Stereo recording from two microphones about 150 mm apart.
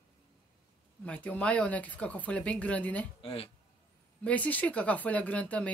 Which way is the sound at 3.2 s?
40° left (ahead or behind).